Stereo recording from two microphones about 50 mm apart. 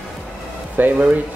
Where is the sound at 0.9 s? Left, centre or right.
Right.